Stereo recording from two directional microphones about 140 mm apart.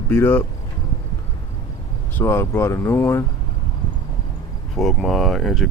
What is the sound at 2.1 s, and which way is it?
Speech, 20° left (ahead or behind).